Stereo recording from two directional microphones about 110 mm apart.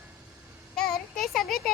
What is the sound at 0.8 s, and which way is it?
Speech, 5° left (ahead or behind).